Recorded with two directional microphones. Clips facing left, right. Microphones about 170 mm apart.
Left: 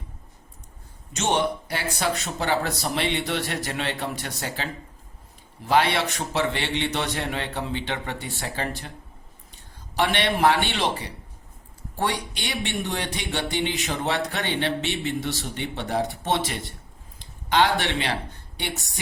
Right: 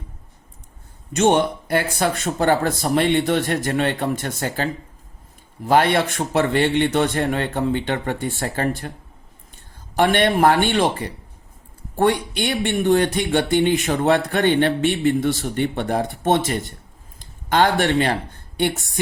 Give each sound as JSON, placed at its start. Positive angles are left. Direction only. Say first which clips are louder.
{"t": 1.1, "sound": "speech", "louder": "right 7 dB", "side_deg": -55}
{"t": 9.9, "sound": "speech", "louder": "right 6 dB", "side_deg": -50}